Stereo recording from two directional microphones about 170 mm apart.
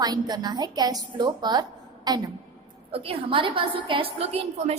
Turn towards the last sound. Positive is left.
turn(degrees=-40)  # may be behind; listen again after turning